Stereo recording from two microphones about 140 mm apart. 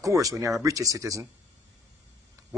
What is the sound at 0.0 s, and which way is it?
Speech, 25° right (ahead or behind).